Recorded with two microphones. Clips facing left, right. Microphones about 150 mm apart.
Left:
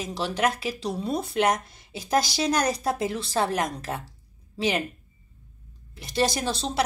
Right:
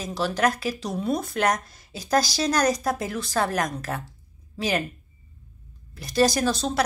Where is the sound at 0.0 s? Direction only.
25° left (ahead or behind).